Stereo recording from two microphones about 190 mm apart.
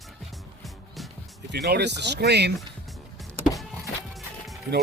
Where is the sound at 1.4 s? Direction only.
60° right (ahead or behind).